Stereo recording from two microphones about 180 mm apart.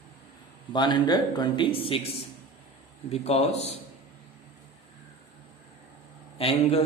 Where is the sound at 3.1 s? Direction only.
35° left (ahead or behind).